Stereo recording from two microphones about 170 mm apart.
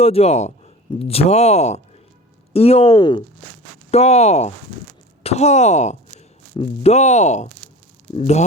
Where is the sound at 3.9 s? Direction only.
40° left (ahead or behind).